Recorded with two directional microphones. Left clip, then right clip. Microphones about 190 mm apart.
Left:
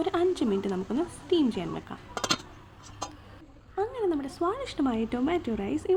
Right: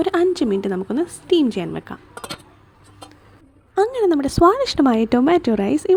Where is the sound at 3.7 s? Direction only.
40° right (ahead or behind).